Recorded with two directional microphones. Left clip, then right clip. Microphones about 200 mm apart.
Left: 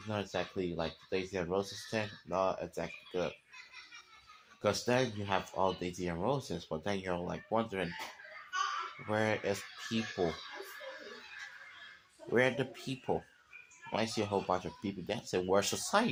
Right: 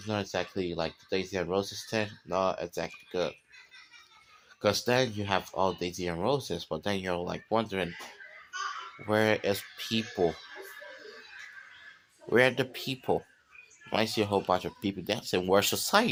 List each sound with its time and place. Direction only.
0.1 s speech: 55° right (ahead or behind)
4.6 s speech: 55° right (ahead or behind)
9.0 s speech: 55° right (ahead or behind)
12.3 s speech: 55° right (ahead or behind)